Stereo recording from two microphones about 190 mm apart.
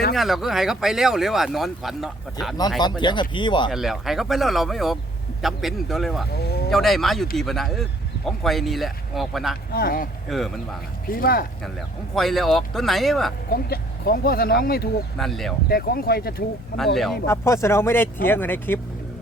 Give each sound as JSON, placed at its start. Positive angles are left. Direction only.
{"t": 0.1, "sound": "speech", "side_deg": 0}
{"t": 3.0, "sound": "speech", "side_deg": 25}
{"t": 3.7, "sound": "speech", "side_deg": 0}
{"t": 6.3, "sound": "speech", "side_deg": 60}
{"t": 6.7, "sound": "speech", "side_deg": 0}
{"t": 9.7, "sound": "speech", "side_deg": 50}
{"t": 10.2, "sound": "speech", "side_deg": 0}
{"t": 11.0, "sound": "speech", "side_deg": 50}
{"t": 12.1, "sound": "speech", "side_deg": 0}
{"t": 13.5, "sound": "speech", "side_deg": 55}
{"t": 15.2, "sound": "speech", "side_deg": 0}
{"t": 15.7, "sound": "speech", "side_deg": 55}
{"t": 16.7, "sound": "speech", "side_deg": 0}
{"t": 17.2, "sound": "speech", "side_deg": 15}